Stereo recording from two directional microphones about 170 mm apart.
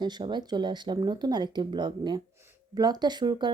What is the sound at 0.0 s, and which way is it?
Speech, 25° right (ahead or behind).